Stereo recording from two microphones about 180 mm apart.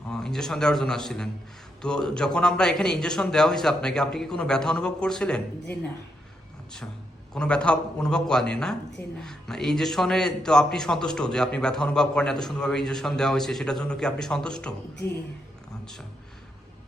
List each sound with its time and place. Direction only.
0.1 s a man's voice: 5° left (ahead or behind)
7.3 s a man's voice: 5° left (ahead or behind)